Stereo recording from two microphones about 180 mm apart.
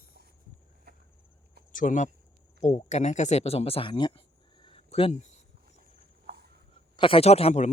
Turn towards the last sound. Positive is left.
turn(degrees=35)  # may be behind; listen again after turning